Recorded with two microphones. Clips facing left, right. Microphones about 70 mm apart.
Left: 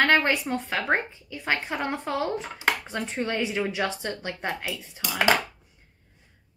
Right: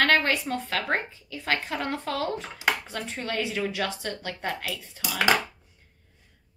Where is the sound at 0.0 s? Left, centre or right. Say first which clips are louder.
Left 1 dB; centre.